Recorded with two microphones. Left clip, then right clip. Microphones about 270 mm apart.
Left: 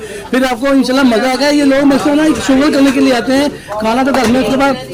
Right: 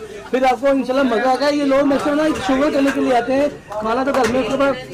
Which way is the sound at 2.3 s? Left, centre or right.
Centre.